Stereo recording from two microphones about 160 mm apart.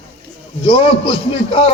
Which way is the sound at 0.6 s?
35° left (ahead or behind).